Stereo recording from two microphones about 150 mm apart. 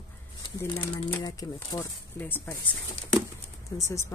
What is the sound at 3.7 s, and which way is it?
Speech, 25° left (ahead or behind).